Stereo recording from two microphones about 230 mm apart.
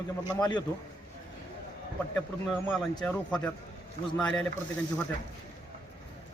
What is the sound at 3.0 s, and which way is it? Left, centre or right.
A man's voice, centre.